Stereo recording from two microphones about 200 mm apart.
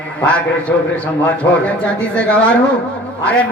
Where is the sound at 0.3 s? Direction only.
5° left (ahead or behind).